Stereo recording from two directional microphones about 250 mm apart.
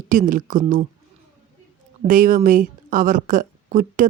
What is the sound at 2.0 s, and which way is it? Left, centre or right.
A woman's voice, right.